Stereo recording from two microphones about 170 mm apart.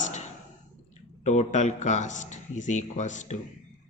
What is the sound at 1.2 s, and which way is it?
A man's voice, 45° left (ahead or behind).